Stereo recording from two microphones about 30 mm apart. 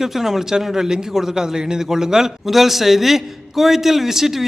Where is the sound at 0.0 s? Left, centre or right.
Centre.